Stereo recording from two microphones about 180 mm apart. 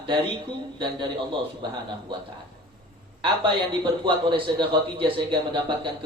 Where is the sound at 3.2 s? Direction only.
25° right (ahead or behind).